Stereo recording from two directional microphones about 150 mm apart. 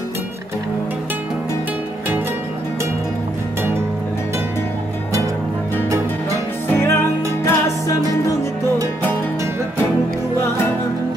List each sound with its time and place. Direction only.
6.7 s music: 15° left (ahead or behind)